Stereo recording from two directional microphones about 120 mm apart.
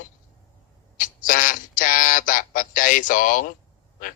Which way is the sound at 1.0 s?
90° left.